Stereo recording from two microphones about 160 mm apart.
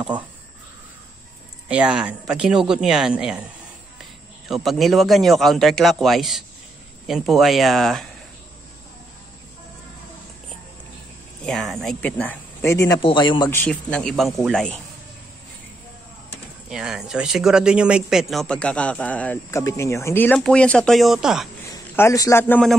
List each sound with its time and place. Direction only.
1.7 s speech: 5° right (ahead or behind)
11.4 s speech: centre (ahead or behind); by 13.0 s 20° left (ahead or behind)
13.0 s speech: 30° left (ahead or behind)
13.5 s speech: 10° left (ahead or behind)
16.6 s speech: 5° right (ahead or behind)
21.9 s speech: 20° left (ahead or behind)